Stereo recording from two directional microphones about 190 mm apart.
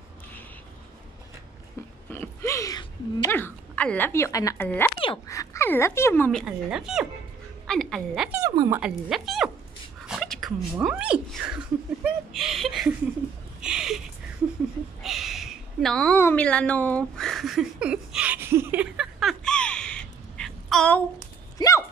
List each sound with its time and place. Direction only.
2.0 s speech: 15° left (ahead or behind)
6.4 s a woman's voice: 5° right (ahead or behind)
8.3 s speech: 15° right (ahead or behind); by 12.9 s centre (ahead or behind)
13.6 s a sound: 5° right (ahead or behind)
15.0 s a sound: centre (ahead or behind)
21.5 s dog: 15° left (ahead or behind)